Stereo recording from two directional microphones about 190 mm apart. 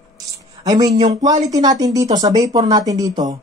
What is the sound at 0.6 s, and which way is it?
Speech, 20° right (ahead or behind).